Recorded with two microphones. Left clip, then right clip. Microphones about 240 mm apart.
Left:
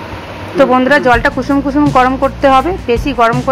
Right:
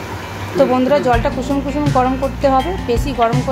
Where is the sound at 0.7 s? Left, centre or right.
Centre.